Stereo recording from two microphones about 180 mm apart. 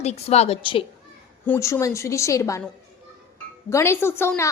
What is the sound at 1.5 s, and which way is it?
A woman's voice, 15° left (ahead or behind).